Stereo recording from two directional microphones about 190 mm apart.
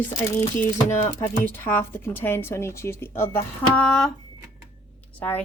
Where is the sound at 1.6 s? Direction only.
10° left (ahead or behind).